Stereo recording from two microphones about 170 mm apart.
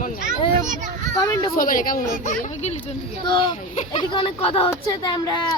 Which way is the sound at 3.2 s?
30° left (ahead or behind).